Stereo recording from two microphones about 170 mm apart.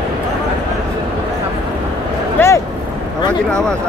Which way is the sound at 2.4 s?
15° left (ahead or behind).